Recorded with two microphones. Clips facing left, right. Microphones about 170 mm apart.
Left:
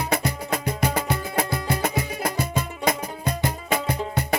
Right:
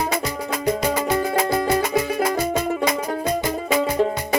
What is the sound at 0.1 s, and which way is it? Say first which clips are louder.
Music: even; 55° left (ahead or behind).